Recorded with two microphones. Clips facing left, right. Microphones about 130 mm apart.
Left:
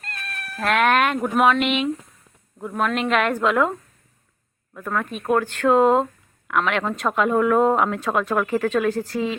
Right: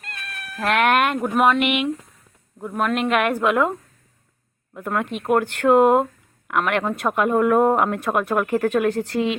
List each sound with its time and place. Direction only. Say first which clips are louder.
0.0 s speech: left 1 dB; 5° right (ahead or behind)
9.0 s speech: right 3 dB; 70° right (ahead or behind)